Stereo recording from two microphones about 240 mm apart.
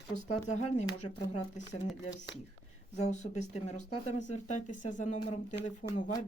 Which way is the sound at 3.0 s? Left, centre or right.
Left.